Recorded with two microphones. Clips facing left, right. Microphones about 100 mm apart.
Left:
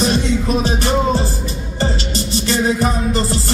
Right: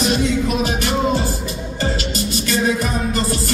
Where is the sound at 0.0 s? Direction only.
30° left (ahead or behind).